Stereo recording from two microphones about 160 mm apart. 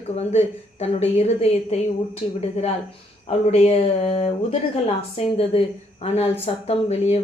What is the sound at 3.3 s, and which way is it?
A woman's voice, 40° left (ahead or behind).